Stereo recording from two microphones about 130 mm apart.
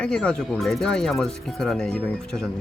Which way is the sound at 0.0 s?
5° left (ahead or behind).